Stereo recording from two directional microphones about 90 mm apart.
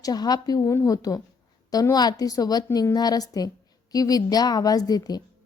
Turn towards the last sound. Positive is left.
turn(degrees=45)  # may be behind; listen again after turning